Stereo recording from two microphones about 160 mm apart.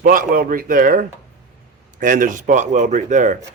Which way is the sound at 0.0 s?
60° right (ahead or behind).